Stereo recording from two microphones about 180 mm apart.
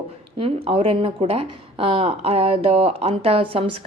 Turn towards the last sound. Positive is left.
turn(degrees=-35)  # may be behind; listen again after turning